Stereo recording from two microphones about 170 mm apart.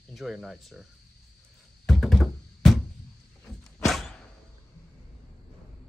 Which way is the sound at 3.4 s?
Centre (ahead or behind).